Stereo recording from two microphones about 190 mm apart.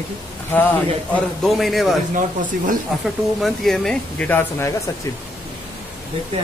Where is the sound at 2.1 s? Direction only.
45° right (ahead or behind).